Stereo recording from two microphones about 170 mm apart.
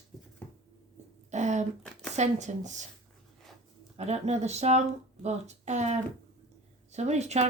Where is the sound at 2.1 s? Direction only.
45° right (ahead or behind).